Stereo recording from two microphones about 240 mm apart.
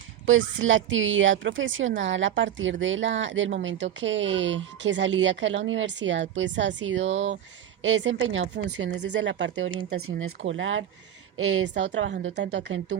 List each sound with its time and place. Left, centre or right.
0.3 s speech: right
7.0 s speech: right
7.8 s speech: right